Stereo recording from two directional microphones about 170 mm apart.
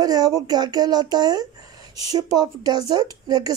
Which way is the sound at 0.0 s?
25° right (ahead or behind).